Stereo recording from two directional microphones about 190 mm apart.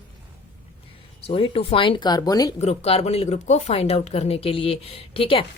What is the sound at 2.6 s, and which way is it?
A woman's voice, 35° left (ahead or behind).